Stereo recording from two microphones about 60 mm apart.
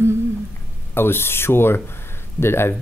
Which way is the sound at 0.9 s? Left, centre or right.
Left.